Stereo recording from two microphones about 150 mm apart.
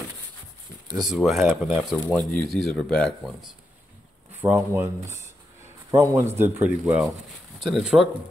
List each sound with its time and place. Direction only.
0.9 s speech: 5° right (ahead or behind)
4.4 s speech: 15° right (ahead or behind)